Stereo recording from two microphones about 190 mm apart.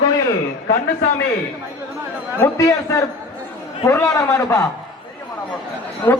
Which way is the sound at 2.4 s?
15° left (ahead or behind).